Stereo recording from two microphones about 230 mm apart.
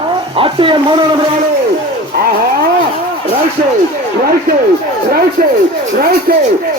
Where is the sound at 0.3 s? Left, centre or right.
Right.